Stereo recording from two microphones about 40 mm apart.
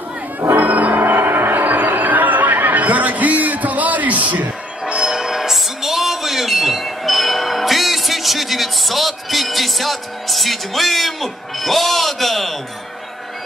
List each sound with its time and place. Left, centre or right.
0.6 s music: right
1.0 s chatter: right
4.8 s music: right; by 12.5 s centre